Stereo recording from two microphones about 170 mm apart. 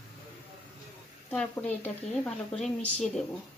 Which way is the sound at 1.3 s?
5° left (ahead or behind).